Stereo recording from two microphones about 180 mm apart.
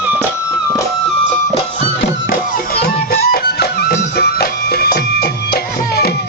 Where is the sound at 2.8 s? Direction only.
60° left (ahead or behind).